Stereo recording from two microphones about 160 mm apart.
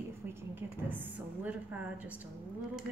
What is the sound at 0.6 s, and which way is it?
A woman's voice, 10° right (ahead or behind).